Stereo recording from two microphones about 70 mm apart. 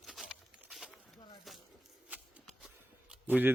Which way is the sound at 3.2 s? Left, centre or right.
Right.